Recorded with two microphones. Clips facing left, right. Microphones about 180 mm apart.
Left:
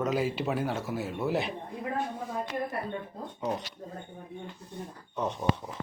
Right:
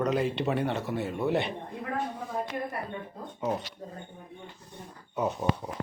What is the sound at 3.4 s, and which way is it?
Speech, 5° right (ahead or behind).